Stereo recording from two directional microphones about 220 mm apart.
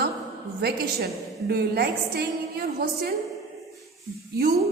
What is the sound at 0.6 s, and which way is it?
A woman's voice, 45° right (ahead or behind).